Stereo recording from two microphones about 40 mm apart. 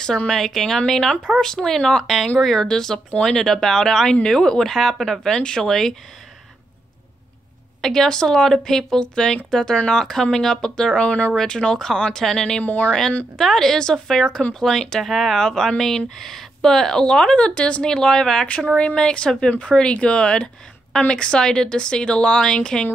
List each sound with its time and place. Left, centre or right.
0.3 s speech: centre
7.8 s speech: centre
9.0 s a woman's voice: left
11.0 s speech: left
11.3 s speech: centre
12.6 s speech: left
13.4 s speech: centre
15.0 s speech: centre
15.3 s speech: centre
17.4 s speech: left
17.8 s speech: centre
18.7 s a woman's voice: left